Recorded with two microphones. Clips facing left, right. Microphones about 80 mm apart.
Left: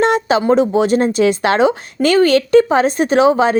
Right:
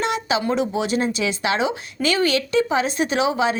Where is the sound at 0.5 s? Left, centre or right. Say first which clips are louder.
Left 9 dB; left.